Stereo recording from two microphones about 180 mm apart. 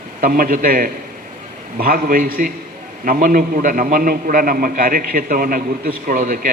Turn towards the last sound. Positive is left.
turn(degrees=-50)  # may be behind; listen again after turning